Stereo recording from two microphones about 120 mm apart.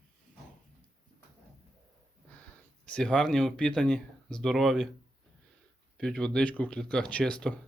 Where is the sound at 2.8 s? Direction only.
10° left (ahead or behind).